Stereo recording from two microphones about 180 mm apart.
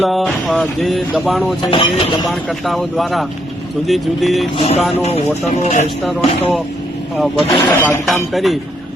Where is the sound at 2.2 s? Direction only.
Centre (ahead or behind).